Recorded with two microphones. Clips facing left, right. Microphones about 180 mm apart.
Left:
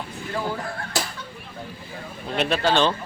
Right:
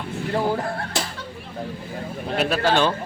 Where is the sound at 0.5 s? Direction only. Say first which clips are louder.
Right 5 dB; 35° right (ahead or behind).